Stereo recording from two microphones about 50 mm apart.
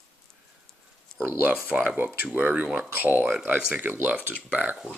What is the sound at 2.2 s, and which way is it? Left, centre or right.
Speech, right.